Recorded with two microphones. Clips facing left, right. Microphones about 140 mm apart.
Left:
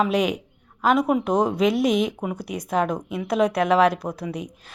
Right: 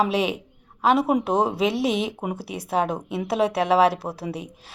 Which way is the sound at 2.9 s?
30° right (ahead or behind).